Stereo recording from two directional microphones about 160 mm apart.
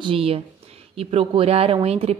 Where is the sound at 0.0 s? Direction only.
35° right (ahead or behind).